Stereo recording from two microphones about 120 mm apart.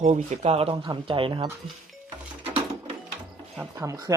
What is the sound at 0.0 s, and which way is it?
Speech, 80° right.